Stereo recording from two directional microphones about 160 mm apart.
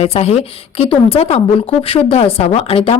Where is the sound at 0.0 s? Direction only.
40° left (ahead or behind).